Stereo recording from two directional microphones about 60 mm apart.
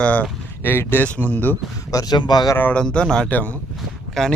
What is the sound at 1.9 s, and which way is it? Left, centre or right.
Speech, left.